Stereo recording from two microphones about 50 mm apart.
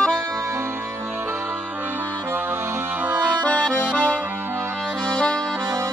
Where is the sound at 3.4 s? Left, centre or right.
Left.